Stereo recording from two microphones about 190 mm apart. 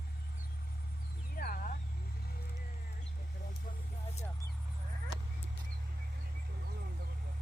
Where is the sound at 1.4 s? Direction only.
50° left (ahead or behind).